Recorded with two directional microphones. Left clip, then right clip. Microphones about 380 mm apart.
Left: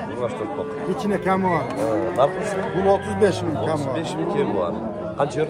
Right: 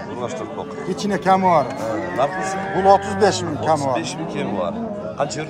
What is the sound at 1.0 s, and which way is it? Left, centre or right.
Speech, centre.